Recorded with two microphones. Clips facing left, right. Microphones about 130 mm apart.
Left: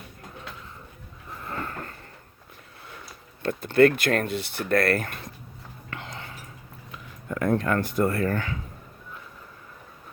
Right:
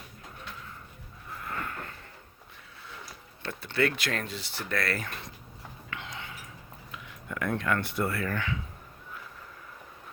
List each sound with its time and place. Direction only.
1.4 s a sound: 30° left (ahead or behind)
3.4 s speech: 45° left (ahead or behind)
5.9 s whispering: 40° left (ahead or behind)
7.3 s speech: 40° left (ahead or behind)